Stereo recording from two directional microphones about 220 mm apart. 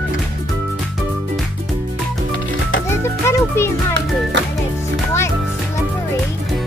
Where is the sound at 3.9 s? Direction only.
55° right (ahead or behind).